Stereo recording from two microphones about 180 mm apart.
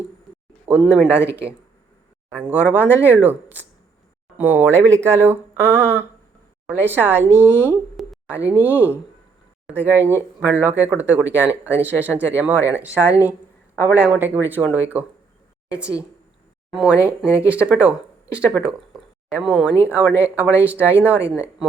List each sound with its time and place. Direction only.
0.7 s speech: 5° right (ahead or behind)
1.2 s speech: 15° left (ahead or behind)
2.3 s speech: 10° right (ahead or behind)
7.9 s a sound: centre (ahead or behind)
8.4 s speech: 10° right (ahead or behind)
8.7 s speech: 10° left (ahead or behind)
9.6 s speech: 10° right (ahead or behind)
16.7 s speech: 5° right (ahead or behind)
17.2 s speech: 15° left (ahead or behind)
17.5 s speech: 5° right (ahead or behind)